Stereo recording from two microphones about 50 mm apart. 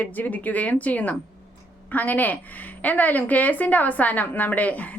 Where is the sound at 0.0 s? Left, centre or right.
Left.